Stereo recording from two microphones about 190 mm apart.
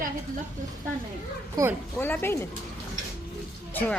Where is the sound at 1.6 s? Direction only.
20° right (ahead or behind).